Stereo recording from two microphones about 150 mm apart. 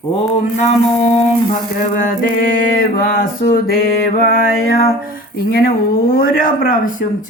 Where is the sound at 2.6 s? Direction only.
75° left (ahead or behind).